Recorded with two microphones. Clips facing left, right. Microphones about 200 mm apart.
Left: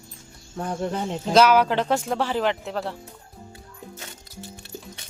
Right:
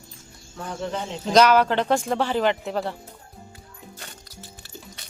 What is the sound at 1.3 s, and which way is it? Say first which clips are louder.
Speech: even; 5° left (ahead or behind).